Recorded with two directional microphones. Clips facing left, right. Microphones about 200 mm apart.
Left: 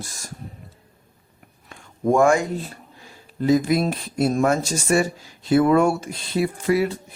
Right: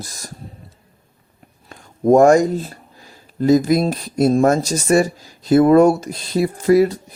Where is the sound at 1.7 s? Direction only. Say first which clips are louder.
Right 7 dB; 40° right (ahead or behind).